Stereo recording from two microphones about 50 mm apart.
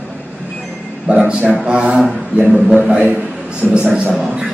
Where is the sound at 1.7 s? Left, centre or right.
Right.